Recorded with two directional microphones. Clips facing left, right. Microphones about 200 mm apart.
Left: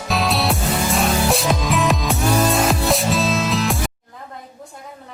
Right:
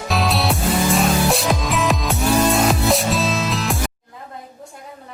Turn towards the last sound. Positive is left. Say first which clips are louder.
# left 2 dB
turn(degrees=0)  # may be behind; listen again after turning